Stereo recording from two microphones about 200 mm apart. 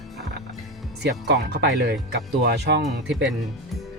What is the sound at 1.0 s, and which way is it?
Speech, 55° right (ahead or behind).